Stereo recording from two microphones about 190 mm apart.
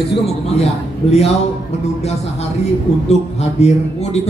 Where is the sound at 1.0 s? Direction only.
30° left (ahead or behind).